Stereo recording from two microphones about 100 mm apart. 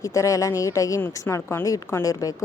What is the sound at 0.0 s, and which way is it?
Speech, 35° left (ahead or behind).